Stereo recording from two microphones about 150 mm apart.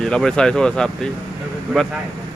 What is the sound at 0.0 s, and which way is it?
Speech, 5° left (ahead or behind).